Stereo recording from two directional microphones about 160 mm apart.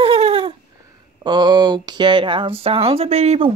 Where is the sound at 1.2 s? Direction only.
25° right (ahead or behind).